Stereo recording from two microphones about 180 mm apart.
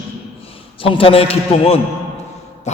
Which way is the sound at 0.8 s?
30° left (ahead or behind).